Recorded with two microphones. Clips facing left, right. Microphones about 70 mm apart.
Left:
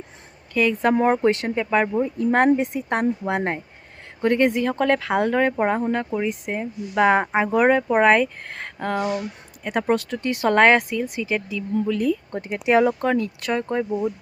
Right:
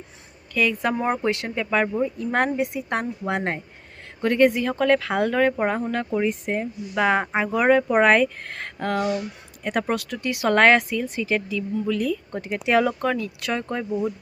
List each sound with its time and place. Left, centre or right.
0.5 s speech: left
2.1 s speech: left
6.1 s speech: centre
6.9 s speech: left
9.9 s speech: left
10.5 s speech: left
13.6 s speech: left